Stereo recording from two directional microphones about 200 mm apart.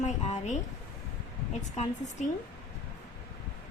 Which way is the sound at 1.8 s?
35° left (ahead or behind).